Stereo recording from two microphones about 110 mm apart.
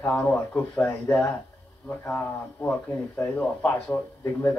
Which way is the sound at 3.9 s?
25° left (ahead or behind).